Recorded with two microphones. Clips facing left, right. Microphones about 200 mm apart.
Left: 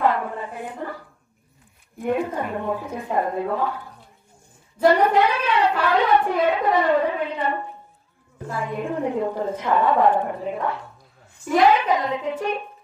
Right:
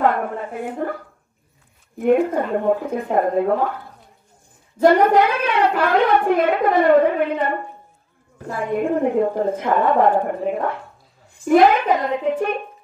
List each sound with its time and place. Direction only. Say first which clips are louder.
0.0 s a sound: right 3 dB; 55° right (ahead or behind)
2.0 s speech: right 7 dB; 55° right (ahead or behind)
4.8 s a woman's voice: right 3 dB; 50° right (ahead or behind)